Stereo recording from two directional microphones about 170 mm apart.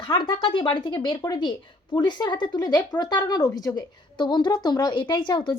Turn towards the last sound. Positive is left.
turn(degrees=25)  # may be behind; listen again after turning